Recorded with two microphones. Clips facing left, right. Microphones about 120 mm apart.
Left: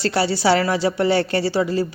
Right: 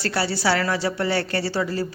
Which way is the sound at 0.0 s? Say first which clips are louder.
Left 4 dB; 20° left (ahead or behind).